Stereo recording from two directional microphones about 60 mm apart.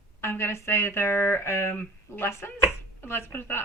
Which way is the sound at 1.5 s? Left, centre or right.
Left.